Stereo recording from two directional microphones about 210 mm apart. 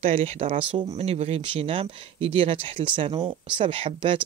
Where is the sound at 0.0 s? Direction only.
30° right (ahead or behind).